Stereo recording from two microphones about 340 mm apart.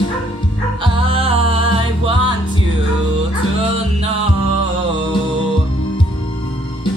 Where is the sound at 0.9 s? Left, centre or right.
Centre.